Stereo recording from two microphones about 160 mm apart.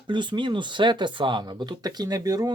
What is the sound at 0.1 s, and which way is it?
Speech, 30° right (ahead or behind).